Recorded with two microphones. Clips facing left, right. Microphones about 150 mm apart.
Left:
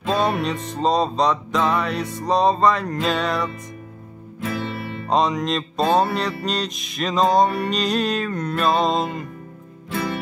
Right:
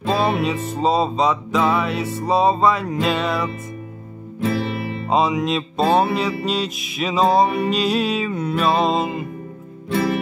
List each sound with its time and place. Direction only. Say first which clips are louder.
0.0 s mantra: right 2 dB; 5° right (ahead or behind)
4.4 s music: right 5 dB; 30° right (ahead or behind)
5.1 s mantra: right 1 dB; 5° right (ahead or behind)